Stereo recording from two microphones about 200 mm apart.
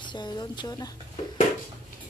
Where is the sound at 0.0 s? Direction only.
20° left (ahead or behind).